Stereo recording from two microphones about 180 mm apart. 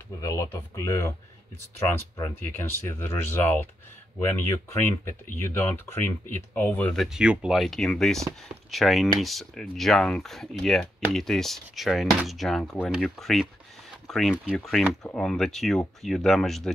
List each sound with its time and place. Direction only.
0.2 s speech: 15° left (ahead or behind); by 16.7 s centre (ahead or behind)